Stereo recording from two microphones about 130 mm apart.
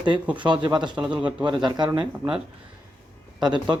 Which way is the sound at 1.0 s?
10° right (ahead or behind).